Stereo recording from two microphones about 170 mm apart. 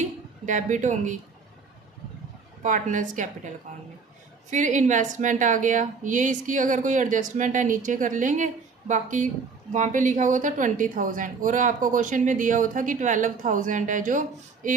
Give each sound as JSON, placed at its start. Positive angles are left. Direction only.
{"t": 0.4, "sound": "a woman's voice", "side_deg": -45}
{"t": 2.6, "sound": "a woman's voice", "side_deg": -50}
{"t": 4.5, "sound": "a woman's voice", "side_deg": -45}